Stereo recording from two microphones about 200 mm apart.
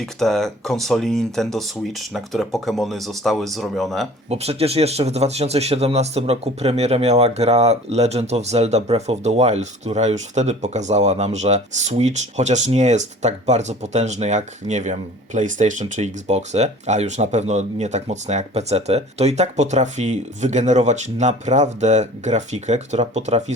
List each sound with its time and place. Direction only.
0.0 s speech: centre (ahead or behind)
4.3 s speech: 30° right (ahead or behind)